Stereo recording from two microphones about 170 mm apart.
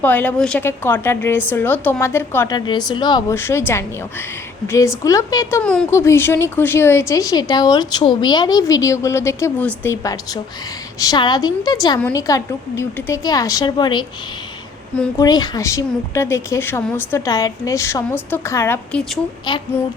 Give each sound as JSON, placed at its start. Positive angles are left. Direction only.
{"t": 0.0, "sound": "a woman's voice", "side_deg": 10}
{"t": 2.6, "sound": "a woman's voice", "side_deg": 25}
{"t": 3.3, "sound": "a woman's voice", "side_deg": 15}
{"t": 15.2, "sound": "a woman's voice", "side_deg": 25}
{"t": 19.5, "sound": "a woman's voice", "side_deg": 25}